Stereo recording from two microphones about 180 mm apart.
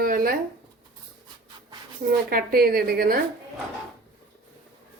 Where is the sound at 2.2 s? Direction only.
55° right (ahead or behind).